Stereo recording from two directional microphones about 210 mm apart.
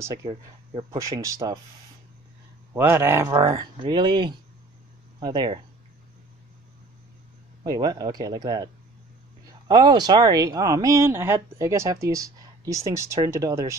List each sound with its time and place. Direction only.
0.0 s speech: 15° right (ahead or behind)
2.7 s speech: 10° right (ahead or behind)
7.6 s speech: 20° right (ahead or behind)
9.7 s speech: 20° right (ahead or behind)